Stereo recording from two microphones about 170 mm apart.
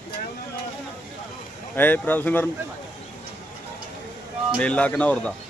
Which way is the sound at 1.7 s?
10° left (ahead or behind).